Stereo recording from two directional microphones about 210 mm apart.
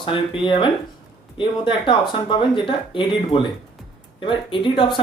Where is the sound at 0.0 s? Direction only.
25° left (ahead or behind).